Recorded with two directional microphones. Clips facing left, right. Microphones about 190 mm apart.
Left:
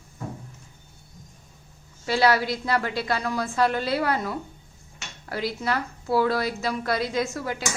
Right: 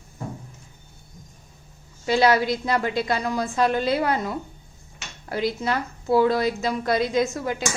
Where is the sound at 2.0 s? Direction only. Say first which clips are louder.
Right 2 dB; 20° right (ahead or behind).